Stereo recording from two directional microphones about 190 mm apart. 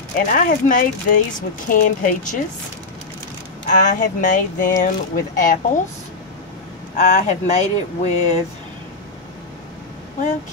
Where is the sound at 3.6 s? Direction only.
40° left (ahead or behind).